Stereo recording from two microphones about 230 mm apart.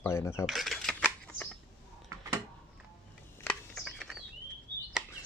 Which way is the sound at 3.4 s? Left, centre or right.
Centre.